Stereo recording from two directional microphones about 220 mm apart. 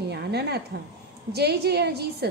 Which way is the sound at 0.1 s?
50° right (ahead or behind).